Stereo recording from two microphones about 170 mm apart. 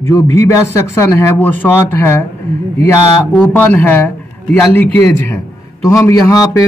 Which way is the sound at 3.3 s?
10° left (ahead or behind).